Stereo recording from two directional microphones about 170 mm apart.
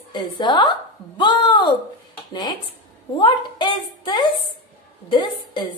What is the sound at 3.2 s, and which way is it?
A woman's voice, 30° left (ahead or behind).